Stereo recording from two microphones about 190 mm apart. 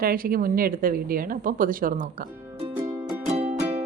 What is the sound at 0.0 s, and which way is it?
A woman's voice, 50° right (ahead or behind).